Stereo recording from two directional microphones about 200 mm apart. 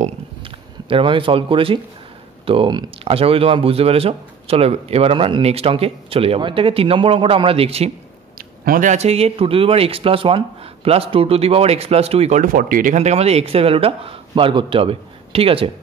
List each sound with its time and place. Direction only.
0.0 s speech: 25° right (ahead or behind)
8.4 s speech: 45° right (ahead or behind); by 15.7 s 30° right (ahead or behind)